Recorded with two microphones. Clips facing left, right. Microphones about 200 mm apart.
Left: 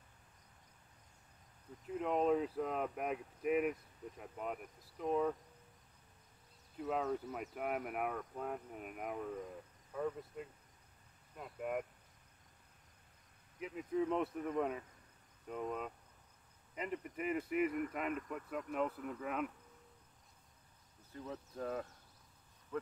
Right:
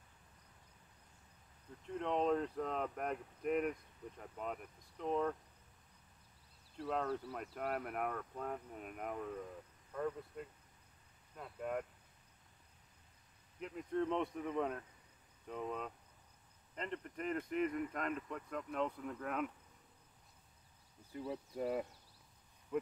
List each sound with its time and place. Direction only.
1.9 s speech: 5° left (ahead or behind)
6.8 s speech: 5° left (ahead or behind)
13.6 s speech: 5° left (ahead or behind)
21.1 s speech: 15° right (ahead or behind)
22.7 s insect: 15° right (ahead or behind)